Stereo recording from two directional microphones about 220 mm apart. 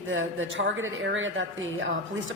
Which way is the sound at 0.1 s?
60° right (ahead or behind).